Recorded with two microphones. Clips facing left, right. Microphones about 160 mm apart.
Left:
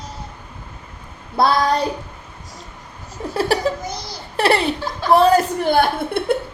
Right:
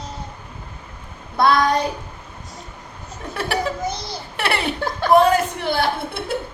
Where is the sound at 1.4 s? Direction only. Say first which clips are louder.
Even; 35° left (ahead or behind).